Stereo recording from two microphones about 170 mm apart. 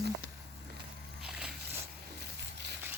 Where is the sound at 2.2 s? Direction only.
80° right.